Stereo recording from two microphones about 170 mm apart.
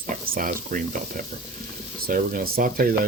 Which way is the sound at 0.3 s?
55° right (ahead or behind).